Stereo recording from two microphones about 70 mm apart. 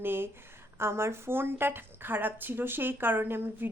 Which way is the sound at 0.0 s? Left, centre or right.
Right.